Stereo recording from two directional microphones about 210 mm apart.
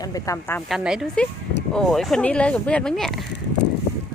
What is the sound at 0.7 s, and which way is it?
Speech, 5° right (ahead or behind).